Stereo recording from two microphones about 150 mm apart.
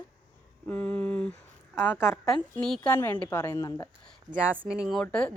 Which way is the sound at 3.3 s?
20° left (ahead or behind).